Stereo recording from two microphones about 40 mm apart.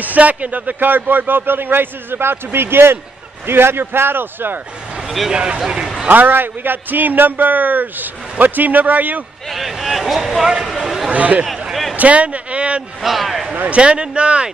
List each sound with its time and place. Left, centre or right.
0.0 s speech: right
5.3 s speech: right
6.0 s a man's voice: right
9.5 s speech: centre
10.7 s a sound: centre
11.1 s speech: right
13.0 s a man's voice: centre
13.7 s speech: right